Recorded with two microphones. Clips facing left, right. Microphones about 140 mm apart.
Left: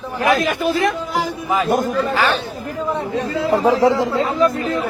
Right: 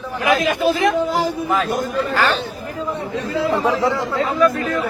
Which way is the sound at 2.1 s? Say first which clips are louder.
Right 2 dB; 10° left (ahead or behind).